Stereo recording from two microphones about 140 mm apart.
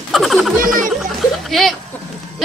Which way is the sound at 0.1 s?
Centre (ahead or behind).